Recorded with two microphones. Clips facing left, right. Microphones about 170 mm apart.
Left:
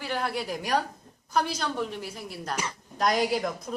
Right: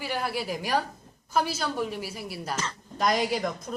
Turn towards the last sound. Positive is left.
turn(degrees=0)  # may be behind; listen again after turning